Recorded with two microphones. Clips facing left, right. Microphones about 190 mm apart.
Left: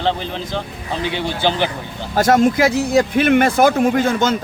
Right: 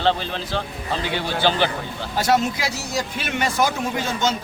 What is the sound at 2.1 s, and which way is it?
Speech, 50° left (ahead or behind).